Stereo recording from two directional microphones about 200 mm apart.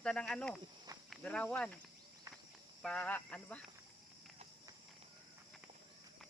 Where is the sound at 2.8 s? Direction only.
5° left (ahead or behind).